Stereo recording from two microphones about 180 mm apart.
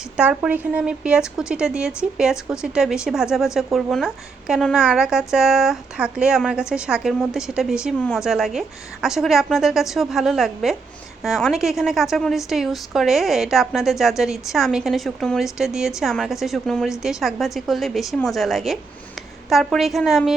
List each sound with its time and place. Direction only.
0.2 s speech: 5° right (ahead or behind)